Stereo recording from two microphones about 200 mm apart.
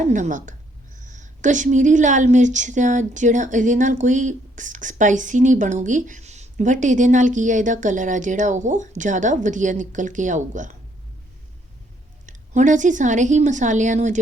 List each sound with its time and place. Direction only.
0.0 s a woman's voice: 40° right (ahead or behind)
12.2 s a woman's voice: 40° right (ahead or behind)